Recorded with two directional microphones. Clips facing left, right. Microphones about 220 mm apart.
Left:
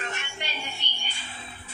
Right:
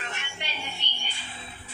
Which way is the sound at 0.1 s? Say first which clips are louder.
Left 2 dB; 45° left (ahead or behind).